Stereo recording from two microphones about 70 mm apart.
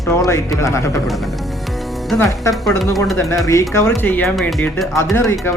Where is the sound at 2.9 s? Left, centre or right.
Centre.